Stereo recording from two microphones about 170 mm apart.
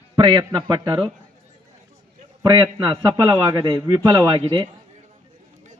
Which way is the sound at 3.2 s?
30° right (ahead or behind).